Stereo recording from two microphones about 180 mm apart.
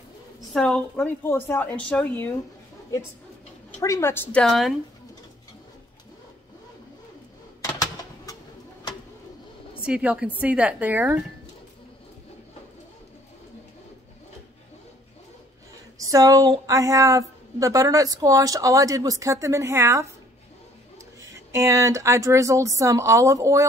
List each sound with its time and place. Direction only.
0.5 s a woman's voice: 5° left (ahead or behind)
3.8 s a woman's voice: 15° left (ahead or behind)
9.8 s speech: 5° right (ahead or behind)
16.0 s a woman's voice: 20° right (ahead or behind)
21.2 s speech: 15° right (ahead or behind)